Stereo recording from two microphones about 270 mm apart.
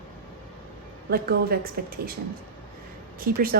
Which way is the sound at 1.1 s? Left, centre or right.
Right.